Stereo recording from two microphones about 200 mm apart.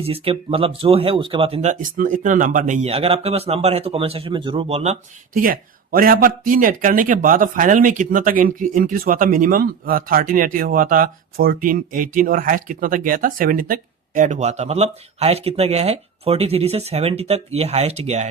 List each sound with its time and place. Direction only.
0.0 s speech: 30° right (ahead or behind)